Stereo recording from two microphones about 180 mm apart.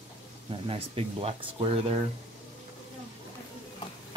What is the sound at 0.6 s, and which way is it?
Speech, 30° right (ahead or behind).